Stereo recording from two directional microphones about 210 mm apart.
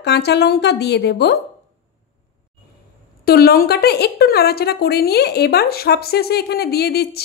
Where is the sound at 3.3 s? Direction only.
45° left (ahead or behind).